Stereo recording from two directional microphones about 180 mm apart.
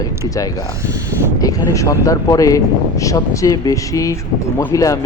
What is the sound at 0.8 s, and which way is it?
Speech, 20° right (ahead or behind).